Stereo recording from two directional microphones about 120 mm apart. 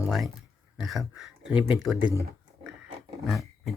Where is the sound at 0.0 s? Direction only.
Centre (ahead or behind).